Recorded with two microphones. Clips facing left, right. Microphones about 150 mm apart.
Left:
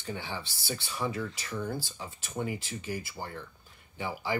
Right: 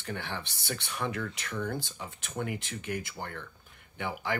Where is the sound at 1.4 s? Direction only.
10° left (ahead or behind).